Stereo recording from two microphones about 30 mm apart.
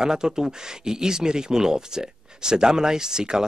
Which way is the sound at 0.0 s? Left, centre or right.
Right.